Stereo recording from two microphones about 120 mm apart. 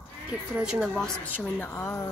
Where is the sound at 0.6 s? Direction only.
5° right (ahead or behind).